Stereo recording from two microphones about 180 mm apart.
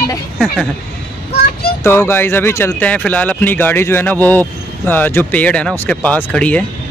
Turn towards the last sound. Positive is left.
turn(degrees=5)  # may be behind; listen again after turning